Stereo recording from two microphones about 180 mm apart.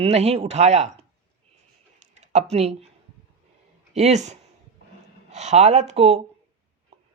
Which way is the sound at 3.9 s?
40° right (ahead or behind).